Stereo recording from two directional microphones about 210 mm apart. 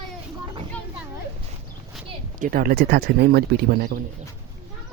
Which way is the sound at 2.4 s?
45° right (ahead or behind).